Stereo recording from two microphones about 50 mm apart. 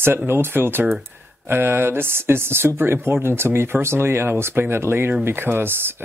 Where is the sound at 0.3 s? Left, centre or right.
Right.